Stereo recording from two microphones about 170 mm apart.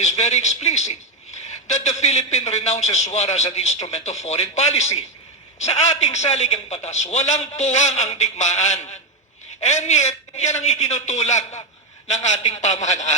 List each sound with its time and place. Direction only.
0.0 s a man's voice: 40° left (ahead or behind)